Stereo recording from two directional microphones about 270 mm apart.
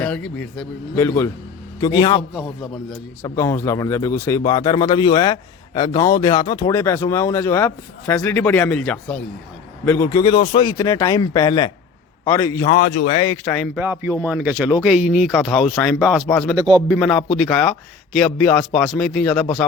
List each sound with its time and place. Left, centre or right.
0.0 s speech: centre
2.3 s speech: centre
3.2 s speech: centre
12.6 s speech: left
13.2 s speech: centre
13.7 s speech: centre
16.6 s a man's voice: centre
16.9 s speech: centre